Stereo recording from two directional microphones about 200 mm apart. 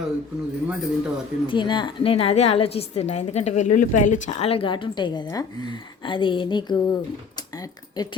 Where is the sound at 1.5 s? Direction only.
25° left (ahead or behind).